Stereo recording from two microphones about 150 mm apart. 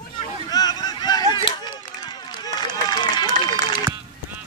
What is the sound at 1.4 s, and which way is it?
Run, 30° left (ahead or behind).